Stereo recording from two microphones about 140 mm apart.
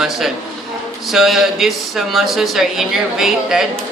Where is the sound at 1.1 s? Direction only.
Centre (ahead or behind).